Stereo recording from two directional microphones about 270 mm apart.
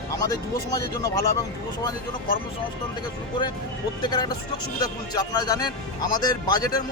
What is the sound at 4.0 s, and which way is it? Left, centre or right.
Speech, centre.